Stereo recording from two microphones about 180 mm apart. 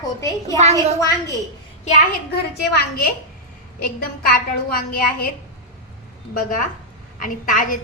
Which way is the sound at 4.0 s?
55° left (ahead or behind).